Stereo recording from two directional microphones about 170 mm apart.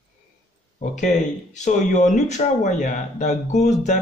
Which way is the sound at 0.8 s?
45° left (ahead or behind).